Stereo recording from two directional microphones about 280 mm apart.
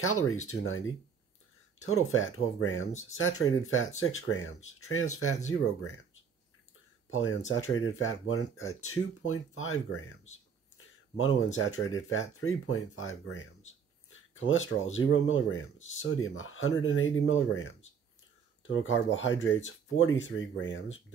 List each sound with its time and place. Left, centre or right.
0.0 s speech: left
7.1 s speech: left
11.1 s speech: left